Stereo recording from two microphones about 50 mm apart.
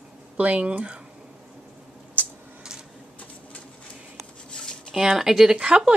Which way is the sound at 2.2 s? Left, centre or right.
Right.